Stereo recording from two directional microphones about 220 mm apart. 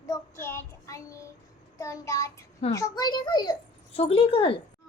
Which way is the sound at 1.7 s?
15° left (ahead or behind).